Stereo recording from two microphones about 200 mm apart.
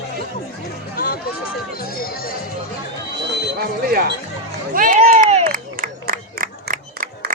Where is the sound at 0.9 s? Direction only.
50° left (ahead or behind).